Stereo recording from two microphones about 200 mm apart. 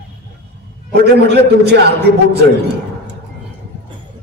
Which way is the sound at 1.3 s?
55° right (ahead or behind).